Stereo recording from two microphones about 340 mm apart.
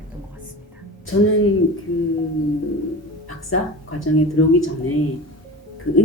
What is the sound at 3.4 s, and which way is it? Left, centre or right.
Speech, left.